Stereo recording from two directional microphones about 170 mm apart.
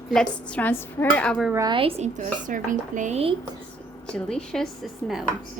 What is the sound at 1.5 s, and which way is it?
Speech, 25° right (ahead or behind).